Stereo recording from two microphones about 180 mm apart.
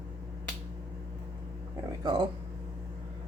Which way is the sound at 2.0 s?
25° right (ahead or behind).